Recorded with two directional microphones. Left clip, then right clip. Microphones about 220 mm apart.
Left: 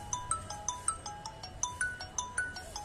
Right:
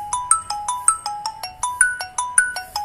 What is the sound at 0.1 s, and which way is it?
Ringtone, 35° right (ahead or behind).